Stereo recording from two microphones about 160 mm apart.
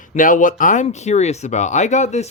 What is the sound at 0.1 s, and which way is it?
Speech, 55° left (ahead or behind).